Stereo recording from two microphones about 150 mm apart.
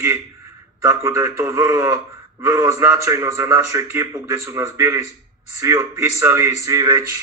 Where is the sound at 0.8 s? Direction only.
20° right (ahead or behind).